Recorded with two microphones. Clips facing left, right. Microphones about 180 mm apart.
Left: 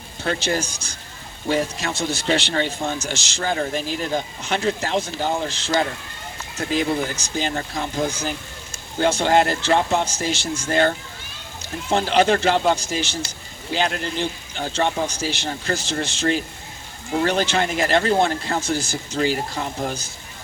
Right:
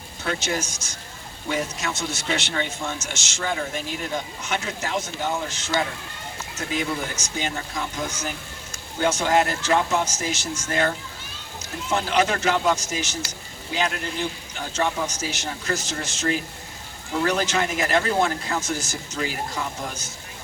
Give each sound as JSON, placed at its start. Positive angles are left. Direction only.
{"t": 0.3, "sound": "a man's voice", "side_deg": 30}